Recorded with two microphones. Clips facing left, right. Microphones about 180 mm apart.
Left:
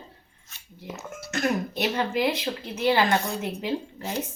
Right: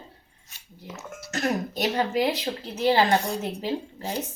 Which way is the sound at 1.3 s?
40° right (ahead or behind).